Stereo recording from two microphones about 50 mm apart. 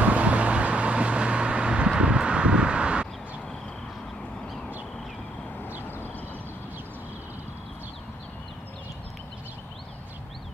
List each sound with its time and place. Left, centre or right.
0.0 s vehicle: right